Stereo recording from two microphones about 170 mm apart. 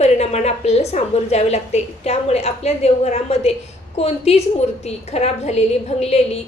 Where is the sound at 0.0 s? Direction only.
40° left (ahead or behind).